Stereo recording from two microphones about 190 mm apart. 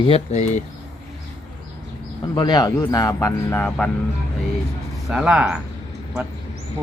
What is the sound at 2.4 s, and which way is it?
A man's voice, 20° left (ahead or behind).